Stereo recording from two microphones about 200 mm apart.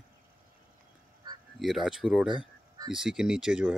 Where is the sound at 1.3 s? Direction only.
20° right (ahead or behind).